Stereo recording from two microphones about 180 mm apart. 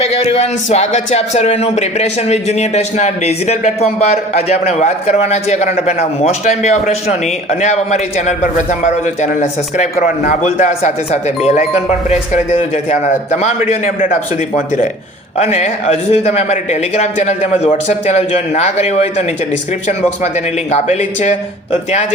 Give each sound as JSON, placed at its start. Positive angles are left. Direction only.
{"t": 0.1, "sound": "speech", "side_deg": 35}
{"t": 15.5, "sound": "speech", "side_deg": 35}
{"t": 20.2, "sound": "speech", "side_deg": 40}